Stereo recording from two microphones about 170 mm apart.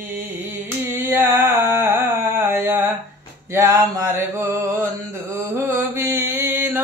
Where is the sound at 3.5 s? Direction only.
20° right (ahead or behind).